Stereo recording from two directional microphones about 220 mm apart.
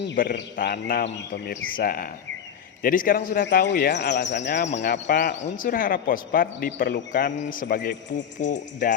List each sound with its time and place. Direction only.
0.2 s speech: 40° left (ahead or behind)
3.4 s speech: 50° left (ahead or behind)
5.4 s speech: 40° left (ahead or behind)